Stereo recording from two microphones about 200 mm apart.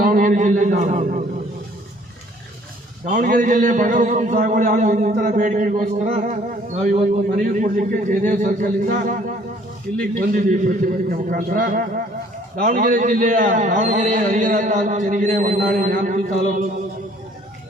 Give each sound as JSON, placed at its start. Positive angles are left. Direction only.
{"t": 0.0, "sound": "a man's voice", "side_deg": -45}
{"t": 3.1, "sound": "a man's voice", "side_deg": -40}